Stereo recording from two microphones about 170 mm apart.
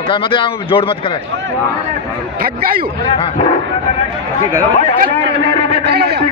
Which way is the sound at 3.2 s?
40° left (ahead or behind).